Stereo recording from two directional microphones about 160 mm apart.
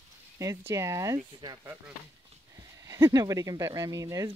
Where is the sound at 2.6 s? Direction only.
20° right (ahead or behind).